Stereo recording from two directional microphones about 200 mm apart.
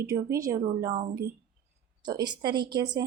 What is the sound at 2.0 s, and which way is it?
A woman's voice, 20° right (ahead or behind).